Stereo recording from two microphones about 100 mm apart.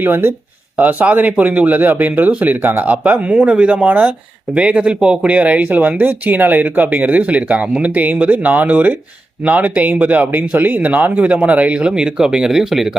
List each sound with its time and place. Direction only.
0.0 s speech: 20° right (ahead or behind); by 13.0 s 5° right (ahead or behind)